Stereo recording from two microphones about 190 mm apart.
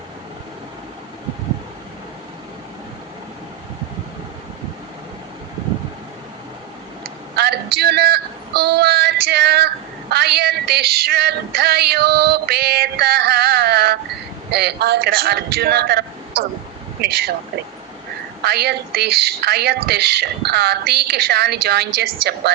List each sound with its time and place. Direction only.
7.3 s female singing: 60° right (ahead or behind)
14.5 s speech: 60° right (ahead or behind)
18.4 s speech: 60° right (ahead or behind)